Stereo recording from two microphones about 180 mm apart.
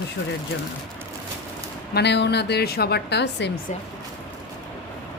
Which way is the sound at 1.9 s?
70° left (ahead or behind).